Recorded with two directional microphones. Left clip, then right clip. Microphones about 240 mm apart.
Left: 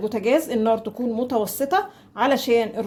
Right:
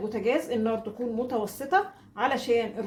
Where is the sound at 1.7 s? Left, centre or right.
Left.